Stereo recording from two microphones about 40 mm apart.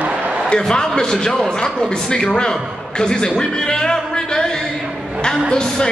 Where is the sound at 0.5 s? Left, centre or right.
Centre.